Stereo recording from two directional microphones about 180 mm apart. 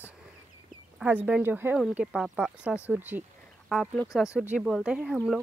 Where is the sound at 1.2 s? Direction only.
10° right (ahead or behind).